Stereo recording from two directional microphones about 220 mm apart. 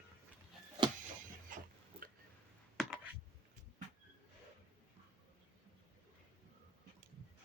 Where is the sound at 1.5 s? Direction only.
35° right (ahead or behind).